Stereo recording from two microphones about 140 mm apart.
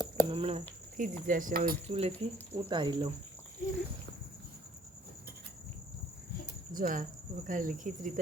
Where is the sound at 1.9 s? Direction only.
45° right (ahead or behind).